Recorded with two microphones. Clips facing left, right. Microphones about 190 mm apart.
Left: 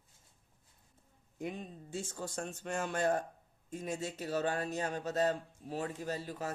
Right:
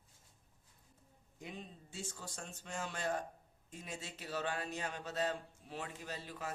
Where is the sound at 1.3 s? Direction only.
50° left (ahead or behind).